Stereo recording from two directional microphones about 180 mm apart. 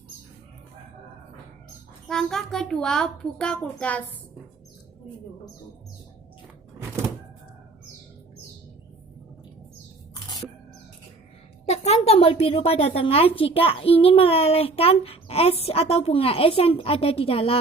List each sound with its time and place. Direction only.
2.0 s a child's voice: centre (ahead or behind)
11.7 s a woman's voice: 35° left (ahead or behind)